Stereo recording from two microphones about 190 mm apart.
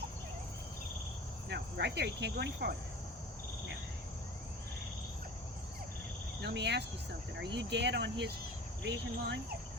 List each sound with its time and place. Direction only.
1.5 s cricket: 60° right (ahead or behind)
6.4 s cricket: 65° right (ahead or behind)